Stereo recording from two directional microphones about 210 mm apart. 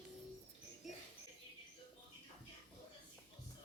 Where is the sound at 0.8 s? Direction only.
Centre (ahead or behind).